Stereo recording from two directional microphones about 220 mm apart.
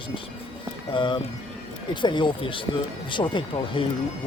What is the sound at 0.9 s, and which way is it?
Speech, 20° left (ahead or behind).